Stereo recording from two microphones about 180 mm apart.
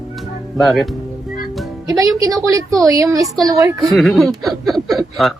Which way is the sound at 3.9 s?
Centre (ahead or behind).